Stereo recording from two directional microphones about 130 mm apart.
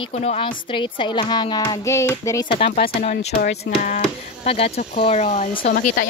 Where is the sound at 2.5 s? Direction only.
55° left (ahead or behind).